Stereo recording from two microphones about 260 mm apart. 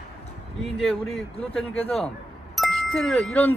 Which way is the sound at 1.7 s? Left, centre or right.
Left.